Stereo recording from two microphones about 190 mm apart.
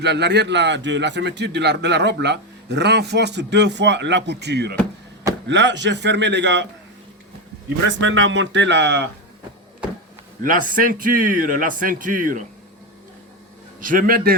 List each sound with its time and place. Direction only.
0.0 s a man's voice: 60° right (ahead or behind)
7.9 s speech: 75° right (ahead or behind)
10.4 s a man's voice: 45° right (ahead or behind)
13.8 s a man's voice: 45° right (ahead or behind)